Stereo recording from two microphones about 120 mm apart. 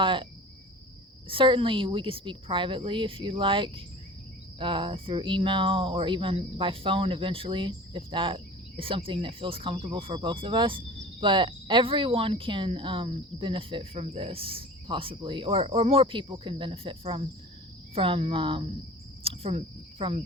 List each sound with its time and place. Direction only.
0.0 s speech: 45° right (ahead or behind)
1.3 s speech: 45° right (ahead or behind)